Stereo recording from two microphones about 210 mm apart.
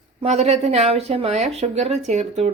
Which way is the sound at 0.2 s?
30° right (ahead or behind).